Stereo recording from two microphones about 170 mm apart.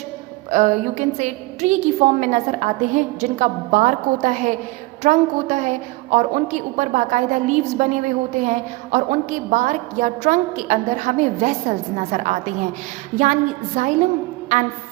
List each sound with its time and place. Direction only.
0.5 s a woman's voice: 45° right (ahead or behind)